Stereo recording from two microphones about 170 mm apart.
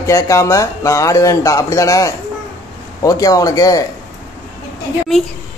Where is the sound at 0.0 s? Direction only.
20° left (ahead or behind).